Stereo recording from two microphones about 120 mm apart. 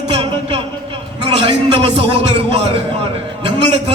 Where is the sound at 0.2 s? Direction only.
45° right (ahead or behind).